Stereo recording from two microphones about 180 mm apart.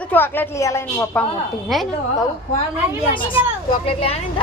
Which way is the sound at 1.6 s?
Centre (ahead or behind).